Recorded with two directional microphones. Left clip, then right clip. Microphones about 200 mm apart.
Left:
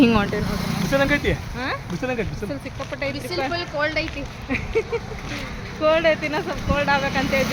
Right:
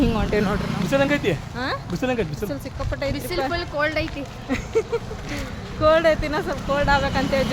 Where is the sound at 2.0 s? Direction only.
40° right (ahead or behind).